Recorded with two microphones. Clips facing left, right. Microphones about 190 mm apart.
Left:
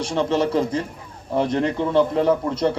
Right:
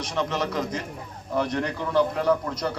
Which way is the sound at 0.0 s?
30° left (ahead or behind).